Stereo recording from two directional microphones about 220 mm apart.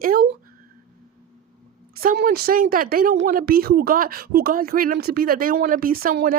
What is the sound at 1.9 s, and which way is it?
Speech, 45° right (ahead or behind).